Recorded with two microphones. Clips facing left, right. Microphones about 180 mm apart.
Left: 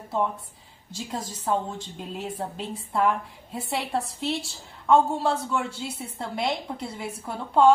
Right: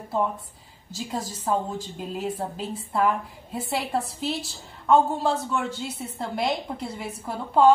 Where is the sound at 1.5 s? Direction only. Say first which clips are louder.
Right 1 dB; 5° right (ahead or behind).